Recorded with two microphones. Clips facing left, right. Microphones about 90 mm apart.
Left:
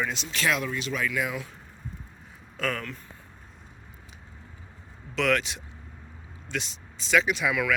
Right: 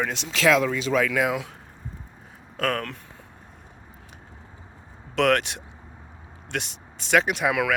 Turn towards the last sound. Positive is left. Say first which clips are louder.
# right 3 dB
turn(degrees=-60)  # may be behind; listen again after turning